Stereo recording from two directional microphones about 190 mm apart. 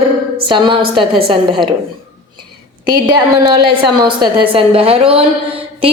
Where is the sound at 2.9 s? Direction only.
20° right (ahead or behind).